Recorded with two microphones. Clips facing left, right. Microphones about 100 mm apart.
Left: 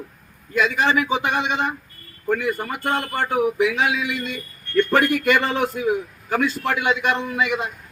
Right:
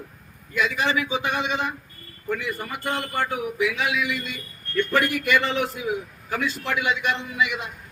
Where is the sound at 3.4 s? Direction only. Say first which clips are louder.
Left 5 dB; 45° left (ahead or behind).